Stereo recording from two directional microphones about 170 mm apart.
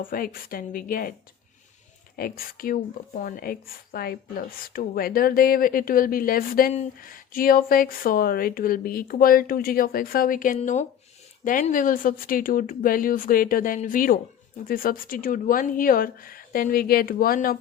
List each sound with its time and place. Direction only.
0.0 s a woman's voice: 55° left (ahead or behind)
2.1 s a woman's voice: 60° left (ahead or behind)